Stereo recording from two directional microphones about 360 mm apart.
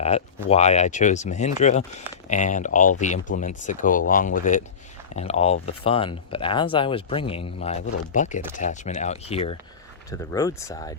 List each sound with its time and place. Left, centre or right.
0.4 s speech: centre